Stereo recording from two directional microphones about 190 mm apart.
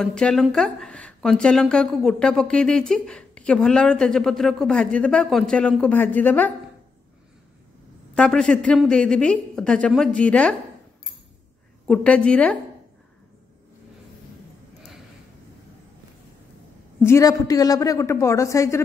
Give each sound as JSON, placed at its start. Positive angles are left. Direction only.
{"t": 0.0, "sound": "speech", "side_deg": 5}
{"t": 8.2, "sound": "speech", "side_deg": 5}
{"t": 11.9, "sound": "speech", "side_deg": 5}
{"t": 17.0, "sound": "a woman's voice", "side_deg": 15}